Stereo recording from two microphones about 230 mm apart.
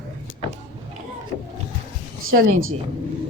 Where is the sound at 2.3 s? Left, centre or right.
Right.